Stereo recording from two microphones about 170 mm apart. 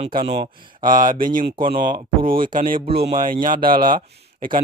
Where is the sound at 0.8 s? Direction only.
55° right (ahead or behind).